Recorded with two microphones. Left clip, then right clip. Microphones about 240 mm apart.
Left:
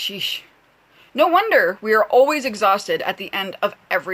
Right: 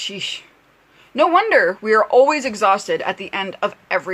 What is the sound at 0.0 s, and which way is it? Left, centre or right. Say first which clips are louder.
Speech: left 1 dB; centre.